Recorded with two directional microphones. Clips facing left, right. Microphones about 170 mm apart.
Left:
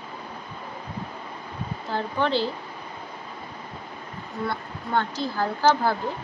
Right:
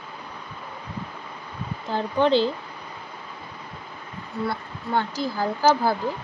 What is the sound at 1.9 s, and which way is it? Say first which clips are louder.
Speech: right 5 dB; 20° right (ahead or behind).